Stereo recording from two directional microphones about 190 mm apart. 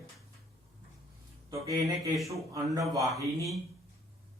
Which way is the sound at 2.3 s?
15° right (ahead or behind).